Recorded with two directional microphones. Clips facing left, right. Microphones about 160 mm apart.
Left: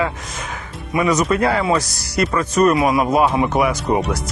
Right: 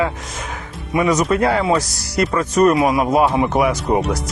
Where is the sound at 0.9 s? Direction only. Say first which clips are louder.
Right 1 dB; 25° right (ahead or behind).